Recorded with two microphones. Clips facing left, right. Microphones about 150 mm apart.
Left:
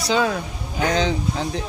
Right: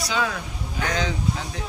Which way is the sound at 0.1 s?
30° left (ahead or behind).